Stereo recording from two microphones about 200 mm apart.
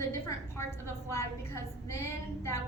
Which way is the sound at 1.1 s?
15° left (ahead or behind).